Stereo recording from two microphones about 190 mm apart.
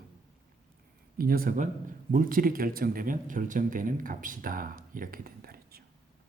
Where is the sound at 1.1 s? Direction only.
50° right (ahead or behind).